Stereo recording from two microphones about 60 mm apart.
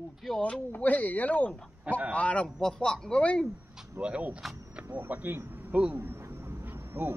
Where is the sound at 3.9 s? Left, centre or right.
Centre.